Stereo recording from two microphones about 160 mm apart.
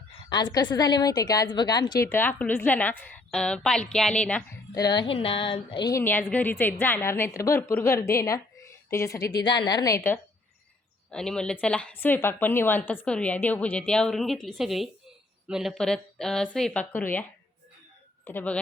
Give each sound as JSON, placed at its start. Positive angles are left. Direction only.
{"t": 0.3, "sound": "a woman's voice", "side_deg": 25}
{"t": 4.7, "sound": "speech", "side_deg": 25}
{"t": 5.9, "sound": "a woman's voice", "side_deg": 15}
{"t": 11.1, "sound": "a woman's voice", "side_deg": 5}
{"t": 18.3, "sound": "a woman's voice", "side_deg": 10}